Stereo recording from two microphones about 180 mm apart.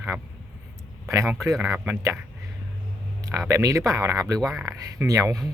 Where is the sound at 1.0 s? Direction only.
15° right (ahead or behind).